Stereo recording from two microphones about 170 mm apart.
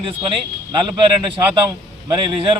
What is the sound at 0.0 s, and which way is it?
Speech, 30° right (ahead or behind).